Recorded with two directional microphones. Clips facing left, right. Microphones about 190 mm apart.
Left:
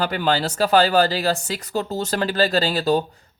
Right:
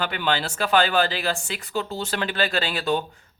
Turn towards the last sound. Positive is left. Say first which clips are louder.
# left 5 dB
turn(degrees=35)  # may be behind; listen again after turning